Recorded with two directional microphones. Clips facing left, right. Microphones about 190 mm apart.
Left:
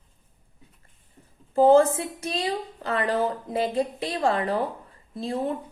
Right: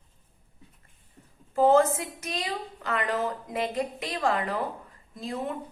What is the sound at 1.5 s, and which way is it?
A woman's voice, 30° left (ahead or behind).